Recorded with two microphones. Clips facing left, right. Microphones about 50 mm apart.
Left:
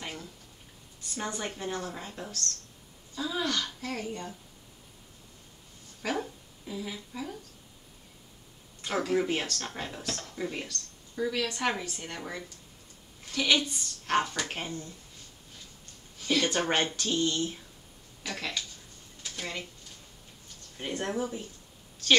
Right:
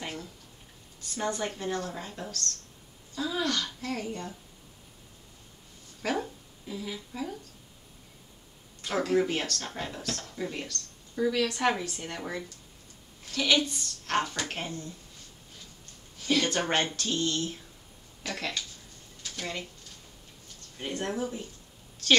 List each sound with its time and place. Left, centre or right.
0.0 s a sound: centre
1.1 s a woman's voice: centre
6.0 s a sound: centre
7.1 s speech: centre
8.9 s a woman's voice: centre
13.3 s a woman's voice: centre
16.4 s a woman's voice: centre
18.3 s speech: centre
19.2 s speech: centre
20.7 s speech: centre
21.0 s a woman's voice: centre